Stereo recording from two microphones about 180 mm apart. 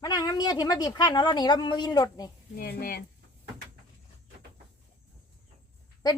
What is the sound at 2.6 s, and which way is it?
Speech, 55° left (ahead or behind).